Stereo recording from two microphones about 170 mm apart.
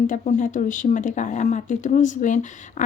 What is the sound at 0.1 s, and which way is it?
Speech, 45° left (ahead or behind).